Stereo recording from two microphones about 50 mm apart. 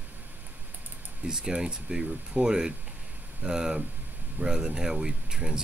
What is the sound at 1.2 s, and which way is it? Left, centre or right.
Speech, centre.